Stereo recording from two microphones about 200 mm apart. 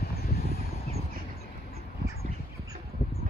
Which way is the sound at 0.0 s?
50° left (ahead or behind).